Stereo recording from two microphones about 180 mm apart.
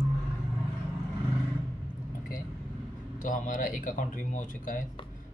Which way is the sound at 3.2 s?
45° left (ahead or behind).